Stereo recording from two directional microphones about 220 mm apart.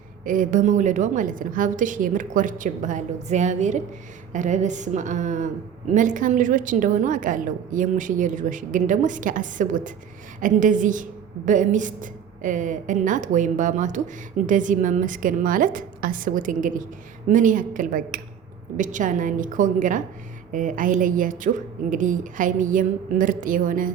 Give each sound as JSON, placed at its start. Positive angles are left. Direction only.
{"t": 0.3, "sound": "a woman's voice", "side_deg": -35}